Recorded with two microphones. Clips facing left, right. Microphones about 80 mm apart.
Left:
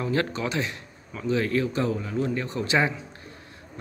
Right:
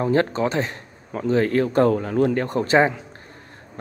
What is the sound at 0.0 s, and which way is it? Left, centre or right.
Speech, right.